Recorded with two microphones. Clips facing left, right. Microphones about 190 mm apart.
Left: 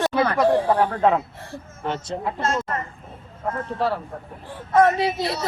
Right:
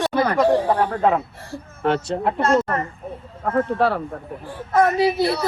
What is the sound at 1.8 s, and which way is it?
Speech, 65° right (ahead or behind).